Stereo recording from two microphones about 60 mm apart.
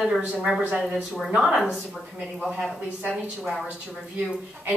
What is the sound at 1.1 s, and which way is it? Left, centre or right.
Speech, centre.